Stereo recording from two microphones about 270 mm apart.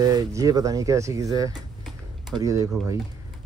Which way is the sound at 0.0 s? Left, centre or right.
Centre.